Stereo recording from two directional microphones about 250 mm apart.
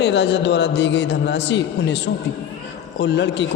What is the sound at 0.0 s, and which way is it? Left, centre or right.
A man's voice, left.